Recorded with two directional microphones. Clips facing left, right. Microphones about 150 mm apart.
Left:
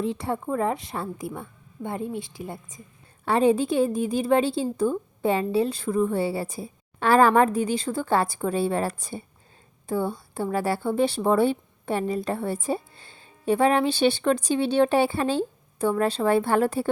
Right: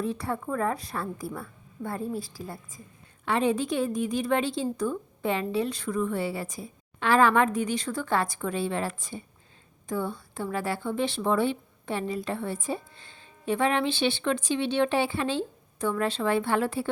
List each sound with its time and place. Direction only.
0.0 s a woman's voice: 25° left (ahead or behind)
3.2 s a woman's voice: 35° left (ahead or behind)